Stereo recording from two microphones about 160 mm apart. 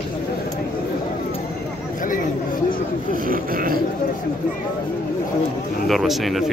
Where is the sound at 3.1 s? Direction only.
60° right (ahead or behind).